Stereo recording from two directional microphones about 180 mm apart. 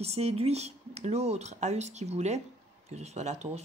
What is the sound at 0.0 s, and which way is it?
Speech, 35° right (ahead or behind).